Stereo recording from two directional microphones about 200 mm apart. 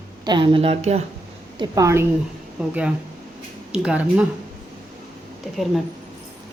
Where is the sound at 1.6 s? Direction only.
15° right (ahead or behind).